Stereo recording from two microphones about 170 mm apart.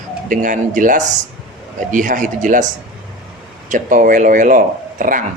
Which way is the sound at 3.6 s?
50° right (ahead or behind).